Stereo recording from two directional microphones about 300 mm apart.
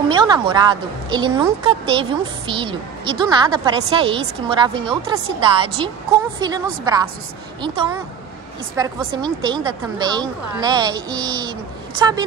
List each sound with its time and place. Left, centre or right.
0.1 s a woman's voice: centre